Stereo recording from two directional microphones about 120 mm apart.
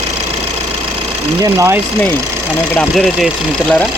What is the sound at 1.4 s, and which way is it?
Speech, 25° right (ahead or behind).